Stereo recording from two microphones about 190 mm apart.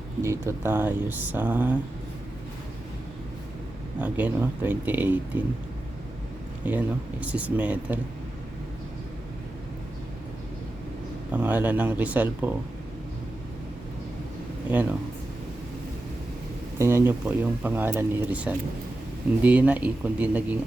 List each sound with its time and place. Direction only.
0.2 s speech: 15° right (ahead or behind)
4.0 s speech: 10° right (ahead or behind)
6.7 s speech: 5° right (ahead or behind)
11.3 s speech: 10° right (ahead or behind)
14.7 s speech: 10° right (ahead or behind)
16.7 s speech: 15° right (ahead or behind)